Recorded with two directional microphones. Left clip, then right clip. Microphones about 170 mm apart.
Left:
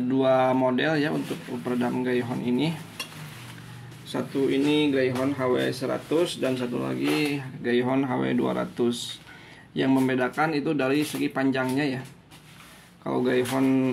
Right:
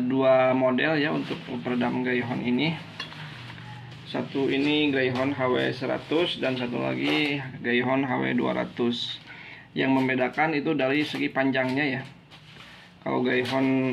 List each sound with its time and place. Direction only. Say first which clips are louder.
0.1 s speech: right 1 dB; 15° left (ahead or behind)
4.1 s speech: left 1 dB; 20° left (ahead or behind)
13.0 s speech: left 1 dB; 20° left (ahead or behind)